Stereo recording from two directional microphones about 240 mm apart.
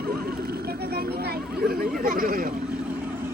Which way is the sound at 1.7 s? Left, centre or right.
Right.